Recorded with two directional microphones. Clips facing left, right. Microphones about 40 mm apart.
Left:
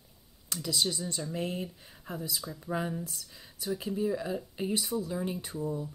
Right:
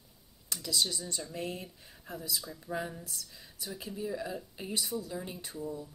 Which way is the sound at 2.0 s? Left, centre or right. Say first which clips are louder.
Left 2 dB; left.